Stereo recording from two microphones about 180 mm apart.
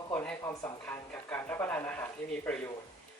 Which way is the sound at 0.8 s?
10° left (ahead or behind).